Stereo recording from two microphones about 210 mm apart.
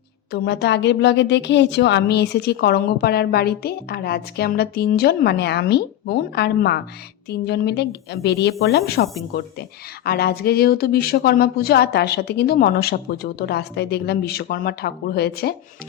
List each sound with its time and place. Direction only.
0.3 s a woman's voice: 50° left (ahead or behind)